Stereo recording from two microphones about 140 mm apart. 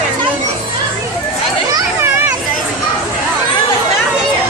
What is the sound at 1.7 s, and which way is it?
Children playing, 20° right (ahead or behind).